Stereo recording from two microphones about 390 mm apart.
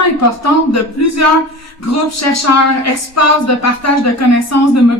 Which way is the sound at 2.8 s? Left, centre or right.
Left.